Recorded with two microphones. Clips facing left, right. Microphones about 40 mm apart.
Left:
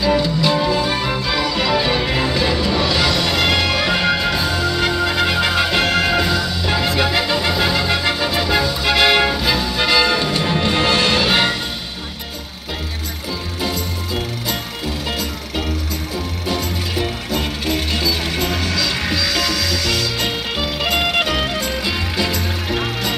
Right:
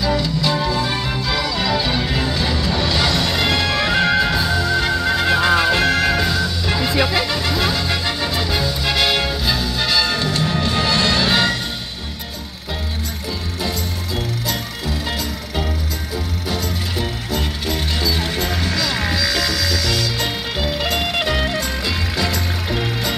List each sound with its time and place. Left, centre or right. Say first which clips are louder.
0.0 s music: left 3 dB; left
10.4 s music: left 2 dB; left
11.1 s music: left 1 dB; centre
13.6 s music: left 2 dB; centre
16.9 s music: left 4 dB; left
22.7 s music: left 1 dB; left